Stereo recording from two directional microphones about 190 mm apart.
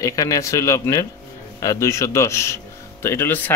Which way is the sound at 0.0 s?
15° left (ahead or behind).